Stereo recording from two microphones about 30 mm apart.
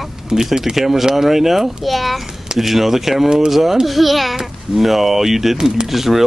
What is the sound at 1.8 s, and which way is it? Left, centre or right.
A child's voice, centre.